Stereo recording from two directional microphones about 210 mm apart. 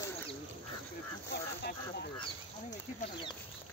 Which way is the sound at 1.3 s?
50° left (ahead or behind).